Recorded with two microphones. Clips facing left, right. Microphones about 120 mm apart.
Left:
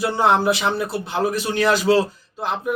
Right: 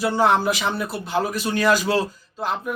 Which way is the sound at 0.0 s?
20° left (ahead or behind).